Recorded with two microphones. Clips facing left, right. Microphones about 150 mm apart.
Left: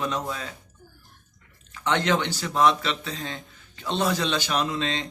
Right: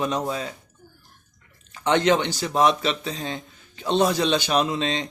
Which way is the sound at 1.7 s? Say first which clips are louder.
Right 4 dB; 20° right (ahead or behind).